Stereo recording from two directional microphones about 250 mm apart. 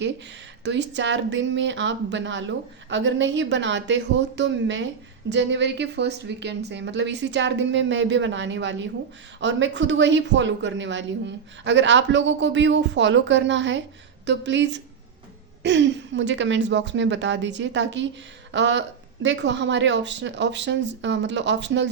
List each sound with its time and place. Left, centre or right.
0.6 s speech: right